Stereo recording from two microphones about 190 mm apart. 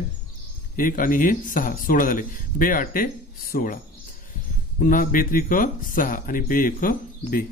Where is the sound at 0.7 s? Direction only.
45° left (ahead or behind).